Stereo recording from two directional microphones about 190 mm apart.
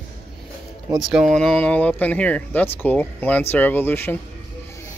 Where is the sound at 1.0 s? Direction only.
Centre (ahead or behind).